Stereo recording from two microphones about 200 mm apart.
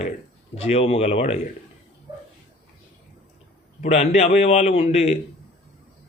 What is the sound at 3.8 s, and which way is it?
A man's voice, 35° left (ahead or behind).